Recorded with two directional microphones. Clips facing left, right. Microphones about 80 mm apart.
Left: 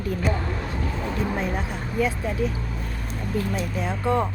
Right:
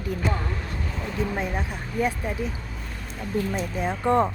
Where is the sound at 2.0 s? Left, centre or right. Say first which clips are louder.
Left 1 dB; right.